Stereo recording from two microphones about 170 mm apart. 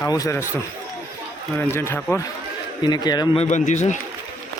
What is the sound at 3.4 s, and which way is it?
Speech, 45° left (ahead or behind).